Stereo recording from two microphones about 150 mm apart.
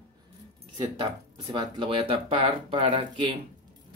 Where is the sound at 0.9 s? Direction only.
30° right (ahead or behind).